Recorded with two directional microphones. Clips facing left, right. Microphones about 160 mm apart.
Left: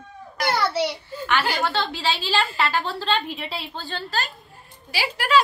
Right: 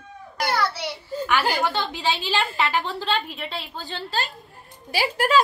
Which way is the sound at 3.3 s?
Centre (ahead or behind).